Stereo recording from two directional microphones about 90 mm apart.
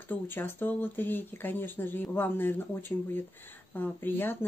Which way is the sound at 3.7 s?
20° left (ahead or behind).